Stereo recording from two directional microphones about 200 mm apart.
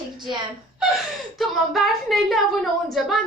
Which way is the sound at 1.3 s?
Centre (ahead or behind).